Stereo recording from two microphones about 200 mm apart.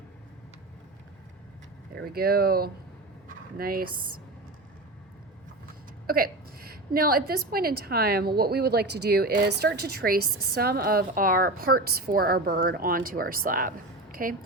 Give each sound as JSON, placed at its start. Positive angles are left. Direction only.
{"t": 2.0, "sound": "a woman's voice", "side_deg": -50}
{"t": 6.1, "sound": "a woman's voice", "side_deg": -50}